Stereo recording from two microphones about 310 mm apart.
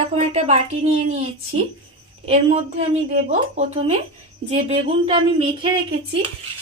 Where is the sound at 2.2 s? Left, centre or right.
Centre.